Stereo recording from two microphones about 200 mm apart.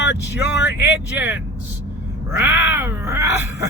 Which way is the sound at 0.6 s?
55° left (ahead or behind).